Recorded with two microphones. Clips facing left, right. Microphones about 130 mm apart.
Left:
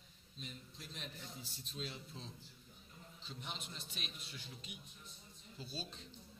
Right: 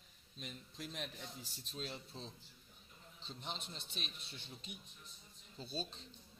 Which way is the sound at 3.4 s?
30° right (ahead or behind).